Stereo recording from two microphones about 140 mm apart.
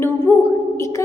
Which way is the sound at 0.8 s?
20° left (ahead or behind).